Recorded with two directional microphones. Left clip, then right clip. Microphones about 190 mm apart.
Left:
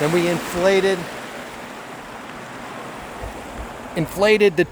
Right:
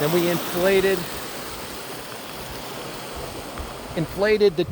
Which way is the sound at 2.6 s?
40° right (ahead or behind).